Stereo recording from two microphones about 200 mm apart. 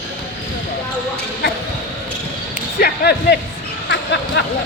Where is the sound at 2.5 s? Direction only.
50° left (ahead or behind).